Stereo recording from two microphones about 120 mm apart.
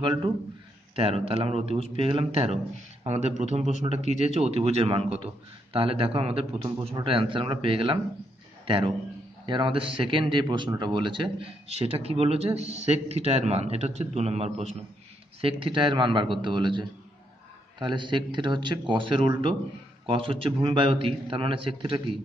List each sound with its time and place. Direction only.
0.0 s speech: 40° right (ahead or behind)
0.9 s a man's voice: 55° right (ahead or behind); by 3.7 s 70° right (ahead or behind)
4.4 s a man's voice: 60° right (ahead or behind)
15.4 s a man's voice: 45° right (ahead or behind)